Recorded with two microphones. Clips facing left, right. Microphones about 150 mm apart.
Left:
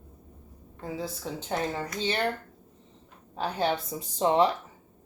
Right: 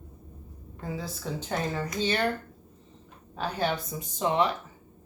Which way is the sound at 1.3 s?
20° left (ahead or behind).